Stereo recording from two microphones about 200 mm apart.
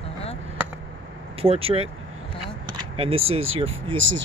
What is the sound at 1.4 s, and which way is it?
Speech, 30° right (ahead or behind).